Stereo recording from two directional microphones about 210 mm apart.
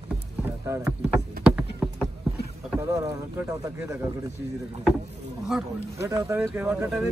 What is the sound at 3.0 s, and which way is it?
Speech, 15° right (ahead or behind).